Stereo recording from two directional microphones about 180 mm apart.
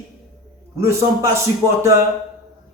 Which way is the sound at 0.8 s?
15° right (ahead or behind).